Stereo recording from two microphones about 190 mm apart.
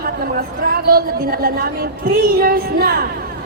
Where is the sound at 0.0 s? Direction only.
50° right (ahead or behind).